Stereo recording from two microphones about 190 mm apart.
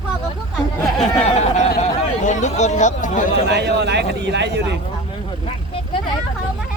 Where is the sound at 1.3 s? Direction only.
40° left (ahead or behind).